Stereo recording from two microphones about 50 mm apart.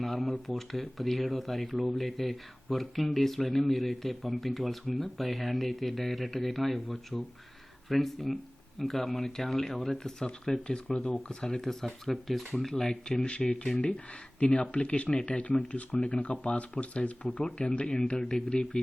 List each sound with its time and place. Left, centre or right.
0.0 s speech: centre
18.2 s speech: centre